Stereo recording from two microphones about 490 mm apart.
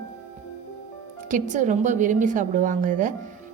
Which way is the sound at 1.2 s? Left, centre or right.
Centre.